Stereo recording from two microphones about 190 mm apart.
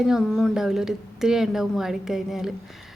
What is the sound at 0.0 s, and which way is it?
A woman's voice, centre (ahead or behind).